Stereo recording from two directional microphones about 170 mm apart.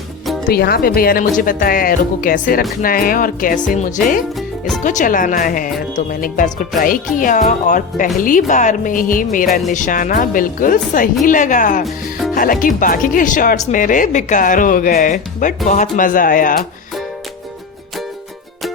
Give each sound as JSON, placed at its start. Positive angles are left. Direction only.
{"t": 0.4, "sound": "speech", "side_deg": 65}
{"t": 4.4, "sound": "music", "side_deg": 0}
{"t": 4.8, "sound": "speech", "side_deg": 50}